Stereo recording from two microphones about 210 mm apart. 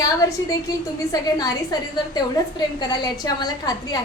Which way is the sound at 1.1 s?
15° left (ahead or behind).